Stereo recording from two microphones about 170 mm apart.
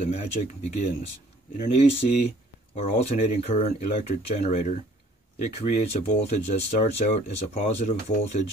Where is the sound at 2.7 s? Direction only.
35° left (ahead or behind).